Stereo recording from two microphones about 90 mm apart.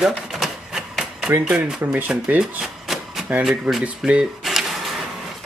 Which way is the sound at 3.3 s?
10° right (ahead or behind).